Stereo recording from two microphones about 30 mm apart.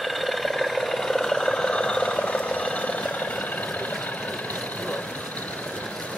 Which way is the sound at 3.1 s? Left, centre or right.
Left.